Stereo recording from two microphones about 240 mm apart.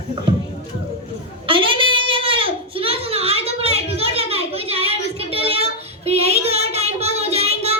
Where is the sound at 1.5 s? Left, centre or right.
Right.